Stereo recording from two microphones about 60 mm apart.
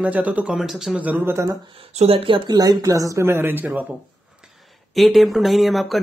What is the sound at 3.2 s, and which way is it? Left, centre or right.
Speech, right.